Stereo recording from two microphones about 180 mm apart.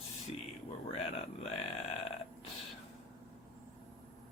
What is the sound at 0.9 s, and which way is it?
Speech, 35° left (ahead or behind).